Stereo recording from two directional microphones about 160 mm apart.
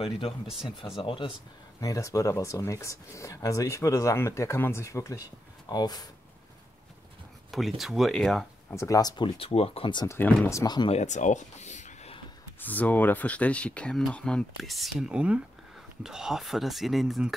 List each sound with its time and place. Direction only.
0.9 s speech: 35° left (ahead or behind)
1.8 s speech: 20° left (ahead or behind)
7.5 s speech: centre (ahead or behind)
8.6 s speech: 20° left (ahead or behind)
10.0 s speech: 10° left (ahead or behind)
10.6 s speech: 25° left (ahead or behind)
10.9 s speech: 45° left (ahead or behind)
12.5 s speech: 10° left (ahead or behind)